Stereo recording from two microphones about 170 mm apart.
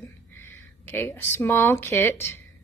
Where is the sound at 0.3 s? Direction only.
15° left (ahead or behind).